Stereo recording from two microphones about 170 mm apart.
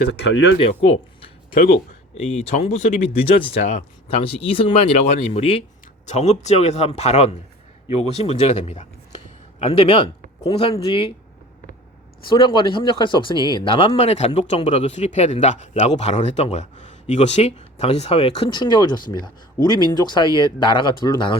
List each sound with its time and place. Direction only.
0.1 s speech: 90° left
0.6 s speech: 35° left (ahead or behind)
1.5 s speech: 60° left (ahead or behind)
2.1 s speech: 40° left (ahead or behind)
4.2 s speech: 35° left (ahead or behind)
12.3 s speech: 30° left (ahead or behind)